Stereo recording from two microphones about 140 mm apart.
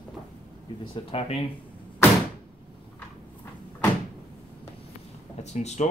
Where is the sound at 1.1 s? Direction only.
45° left (ahead or behind).